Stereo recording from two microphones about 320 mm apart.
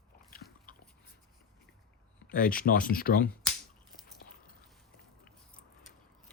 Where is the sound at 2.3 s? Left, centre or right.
Left.